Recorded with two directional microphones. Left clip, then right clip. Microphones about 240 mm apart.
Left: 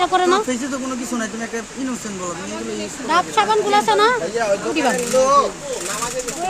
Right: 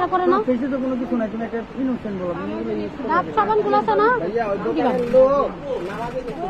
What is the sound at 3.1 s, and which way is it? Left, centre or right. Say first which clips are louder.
A woman's voice: left 2 dB; left.